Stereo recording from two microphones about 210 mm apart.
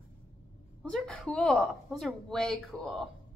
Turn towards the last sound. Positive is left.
turn(degrees=0)  # may be behind; listen again after turning